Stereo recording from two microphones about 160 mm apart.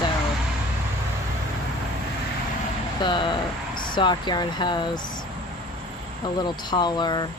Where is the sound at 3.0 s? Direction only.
30° left (ahead or behind).